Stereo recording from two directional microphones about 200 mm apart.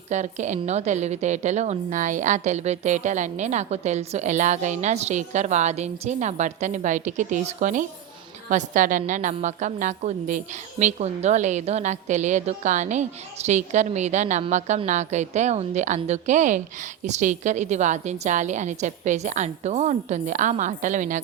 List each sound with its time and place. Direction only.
0.1 s a woman's voice: 35° right (ahead or behind)